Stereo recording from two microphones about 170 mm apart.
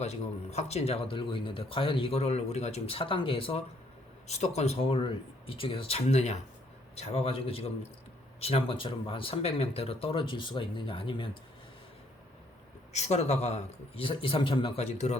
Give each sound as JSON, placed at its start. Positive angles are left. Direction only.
{"t": 0.0, "sound": "speech", "side_deg": 40}
{"t": 12.9, "sound": "speech", "side_deg": 40}